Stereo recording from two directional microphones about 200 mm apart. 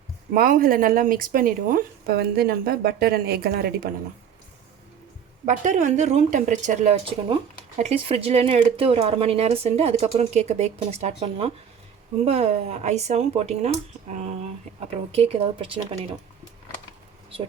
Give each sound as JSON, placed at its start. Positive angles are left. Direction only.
{"t": 0.3, "sound": "speech", "side_deg": -45}
{"t": 5.5, "sound": "speech", "side_deg": -40}